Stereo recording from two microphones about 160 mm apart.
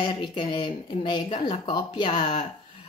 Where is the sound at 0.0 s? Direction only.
25° left (ahead or behind).